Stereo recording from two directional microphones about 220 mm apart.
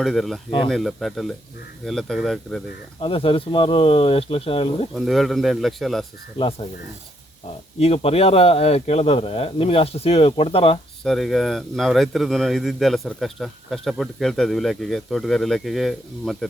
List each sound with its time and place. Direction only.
0.0 s a man's voice: centre (ahead or behind)
3.0 s speech: 25° left (ahead or behind)
4.9 s a man's voice: centre (ahead or behind)
7.8 s speech: 25° left (ahead or behind)
11.0 s a man's voice: centre (ahead or behind)